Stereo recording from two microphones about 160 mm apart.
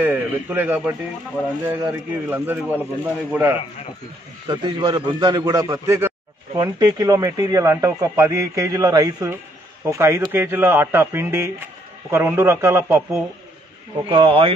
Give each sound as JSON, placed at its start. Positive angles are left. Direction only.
{"t": 0.0, "sound": "a man's voice", "side_deg": -10}
{"t": 4.5, "sound": "a man's voice", "side_deg": -25}
{"t": 14.0, "sound": "speech", "side_deg": -35}